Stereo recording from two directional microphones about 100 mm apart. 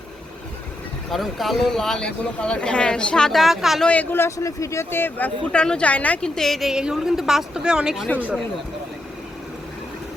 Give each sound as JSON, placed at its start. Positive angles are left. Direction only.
{"t": 1.1, "sound": "speech", "side_deg": 0}
{"t": 3.8, "sound": "a man's voice", "side_deg": 15}
{"t": 8.0, "sound": "a man's voice", "side_deg": 15}